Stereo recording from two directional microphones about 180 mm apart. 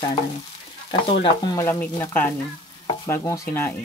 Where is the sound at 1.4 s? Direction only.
15° left (ahead or behind).